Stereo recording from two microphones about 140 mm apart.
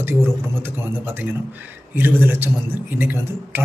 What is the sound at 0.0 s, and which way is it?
A man's voice, 15° right (ahead or behind).